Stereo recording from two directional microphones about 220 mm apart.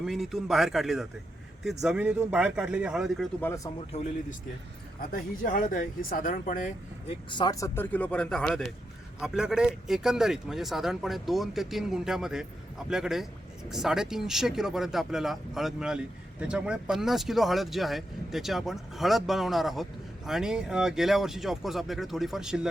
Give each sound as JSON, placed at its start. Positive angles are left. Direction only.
{"t": 0.0, "sound": "speech", "side_deg": 0}
{"t": 3.4, "sound": "speech", "side_deg": 15}
{"t": 4.9, "sound": "speech", "side_deg": 40}
{"t": 7.3, "sound": "speech", "side_deg": 20}